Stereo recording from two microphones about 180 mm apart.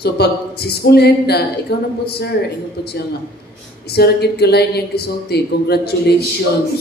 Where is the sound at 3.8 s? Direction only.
60° left (ahead or behind).